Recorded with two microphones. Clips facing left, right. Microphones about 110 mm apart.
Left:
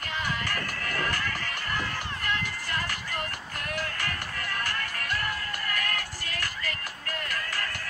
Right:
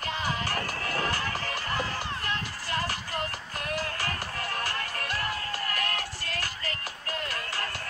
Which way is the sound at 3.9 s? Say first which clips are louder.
Right 1 dB; 35° right (ahead or behind).